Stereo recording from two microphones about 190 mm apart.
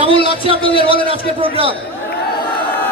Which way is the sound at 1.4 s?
30° right (ahead or behind).